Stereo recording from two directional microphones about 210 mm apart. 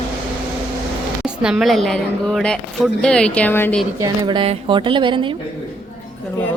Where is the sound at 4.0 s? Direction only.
20° right (ahead or behind).